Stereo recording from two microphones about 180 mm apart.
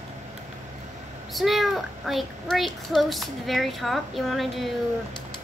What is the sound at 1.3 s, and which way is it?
A child's voice, centre (ahead or behind).